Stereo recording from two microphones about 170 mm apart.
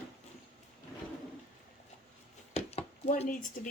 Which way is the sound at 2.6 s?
40° left (ahead or behind).